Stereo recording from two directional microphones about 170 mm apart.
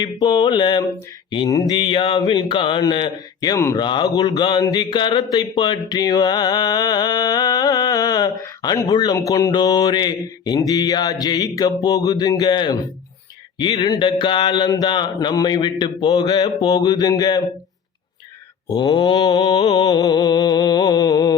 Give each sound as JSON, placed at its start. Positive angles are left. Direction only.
{"t": 0.0, "sound": "a man's voice", "side_deg": 25}
{"t": 18.7, "sound": "speech", "side_deg": 30}